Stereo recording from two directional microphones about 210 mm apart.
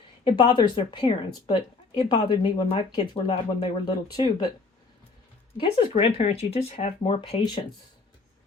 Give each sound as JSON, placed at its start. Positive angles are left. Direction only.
{"t": 0.3, "sound": "speech", "side_deg": 25}
{"t": 5.5, "sound": "speech", "side_deg": 25}